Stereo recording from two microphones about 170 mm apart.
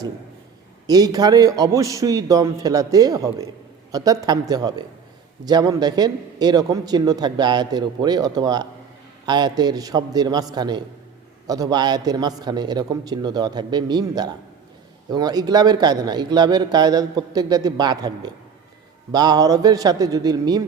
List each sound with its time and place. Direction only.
0.9 s speech: 20° right (ahead or behind)